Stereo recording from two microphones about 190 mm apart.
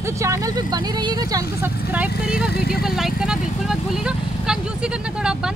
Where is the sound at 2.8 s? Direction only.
Centre (ahead or behind).